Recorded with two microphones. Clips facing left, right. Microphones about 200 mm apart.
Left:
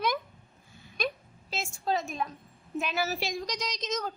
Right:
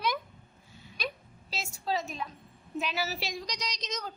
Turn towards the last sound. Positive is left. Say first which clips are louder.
# left 5 dB
turn(degrees=50)  # may be behind; listen again after turning